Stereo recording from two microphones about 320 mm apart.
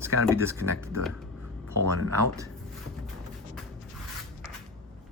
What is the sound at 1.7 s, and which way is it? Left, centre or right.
Speech, right.